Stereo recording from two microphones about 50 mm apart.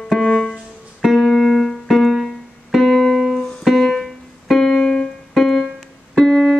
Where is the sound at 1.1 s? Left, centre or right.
Centre.